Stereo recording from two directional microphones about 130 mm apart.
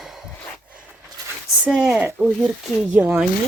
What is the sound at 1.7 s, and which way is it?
Speech, 5° right (ahead or behind).